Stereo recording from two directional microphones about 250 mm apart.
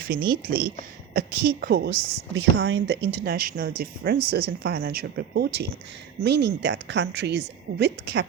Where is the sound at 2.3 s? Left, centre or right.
Right.